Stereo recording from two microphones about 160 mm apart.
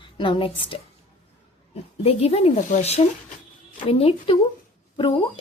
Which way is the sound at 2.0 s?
40° left (ahead or behind).